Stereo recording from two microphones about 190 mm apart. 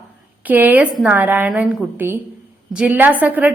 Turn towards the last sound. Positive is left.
turn(degrees=-10)  # may be behind; listen again after turning